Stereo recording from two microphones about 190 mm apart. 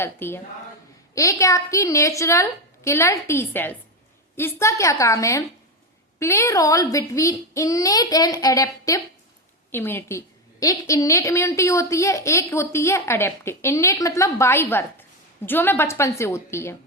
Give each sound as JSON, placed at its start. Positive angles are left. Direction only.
{"t": 0.0, "sound": "a woman's voice", "side_deg": 10}